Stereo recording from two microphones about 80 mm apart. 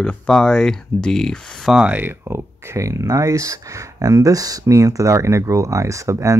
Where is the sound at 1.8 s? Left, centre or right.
Right.